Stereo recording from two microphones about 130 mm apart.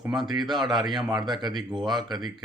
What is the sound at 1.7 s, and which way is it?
Speech, centre (ahead or behind).